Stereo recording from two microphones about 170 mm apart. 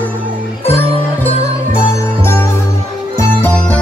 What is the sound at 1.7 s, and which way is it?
Music, 15° left (ahead or behind).